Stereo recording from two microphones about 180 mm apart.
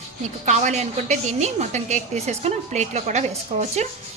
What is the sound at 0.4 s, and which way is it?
A woman's voice, 40° right (ahead or behind).